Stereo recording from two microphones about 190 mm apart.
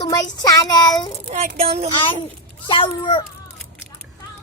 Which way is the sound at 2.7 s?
25° left (ahead or behind).